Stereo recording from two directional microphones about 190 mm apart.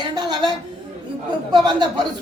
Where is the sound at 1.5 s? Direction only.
25° right (ahead or behind).